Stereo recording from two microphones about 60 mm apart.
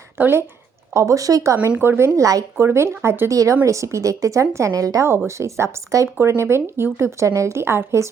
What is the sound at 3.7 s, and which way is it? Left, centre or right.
A woman's voice, right.